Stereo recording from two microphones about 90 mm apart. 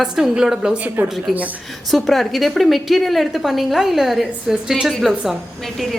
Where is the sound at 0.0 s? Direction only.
5° right (ahead or behind).